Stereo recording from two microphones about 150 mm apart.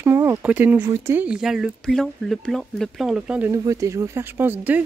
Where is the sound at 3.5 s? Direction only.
20° right (ahead or behind).